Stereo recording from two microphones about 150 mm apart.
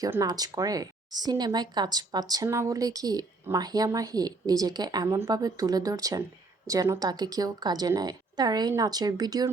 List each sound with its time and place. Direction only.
0.0 s speech: 20° right (ahead or behind)